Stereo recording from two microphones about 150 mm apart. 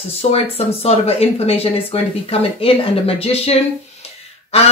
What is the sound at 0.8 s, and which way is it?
Speech, 40° left (ahead or behind).